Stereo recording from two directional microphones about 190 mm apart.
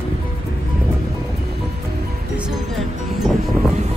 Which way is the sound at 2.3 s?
5° right (ahead or behind).